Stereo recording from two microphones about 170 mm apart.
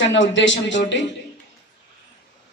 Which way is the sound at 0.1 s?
90° left.